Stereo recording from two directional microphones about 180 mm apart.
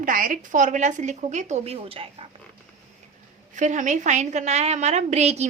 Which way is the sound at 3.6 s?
45° right (ahead or behind).